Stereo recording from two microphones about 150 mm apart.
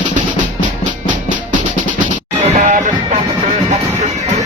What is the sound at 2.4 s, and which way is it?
Music, 50° right (ahead or behind).